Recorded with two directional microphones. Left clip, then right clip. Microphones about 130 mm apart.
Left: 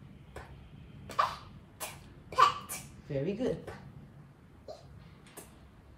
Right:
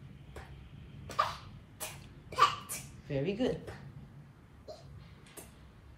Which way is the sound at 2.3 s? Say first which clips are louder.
Left 3 dB; 15° left (ahead or behind).